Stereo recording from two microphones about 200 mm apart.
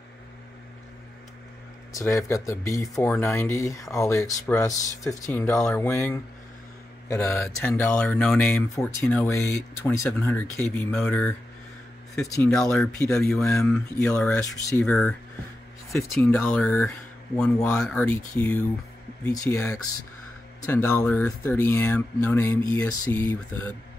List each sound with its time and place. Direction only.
1.9 s speech: 15° left (ahead or behind)